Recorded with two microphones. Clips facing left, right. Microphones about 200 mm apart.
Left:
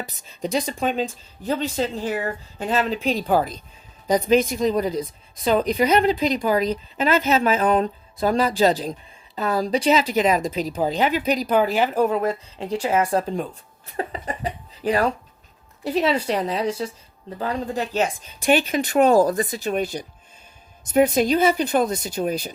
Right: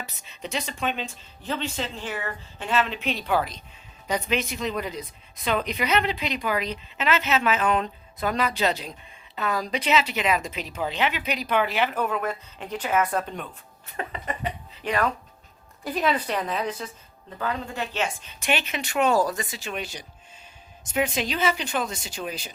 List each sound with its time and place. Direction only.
0.0 s a woman's voice: 35° left (ahead or behind)
20.9 s a woman's voice: 40° left (ahead or behind)